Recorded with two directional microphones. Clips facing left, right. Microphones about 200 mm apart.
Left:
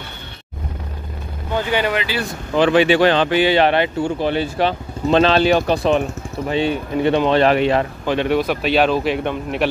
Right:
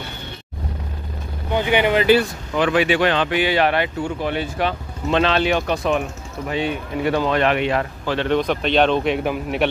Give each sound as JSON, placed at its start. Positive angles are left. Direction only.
{"t": 1.5, "sound": "speech", "side_deg": -20}
{"t": 2.5, "sound": "speech", "side_deg": 30}
{"t": 8.0, "sound": "speech", "side_deg": 15}